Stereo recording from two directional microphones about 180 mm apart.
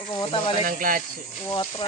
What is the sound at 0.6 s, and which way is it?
Speech, 50° right (ahead or behind).